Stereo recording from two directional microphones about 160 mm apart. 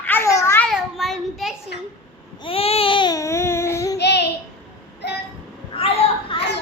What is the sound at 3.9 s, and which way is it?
Child singing, 90° left.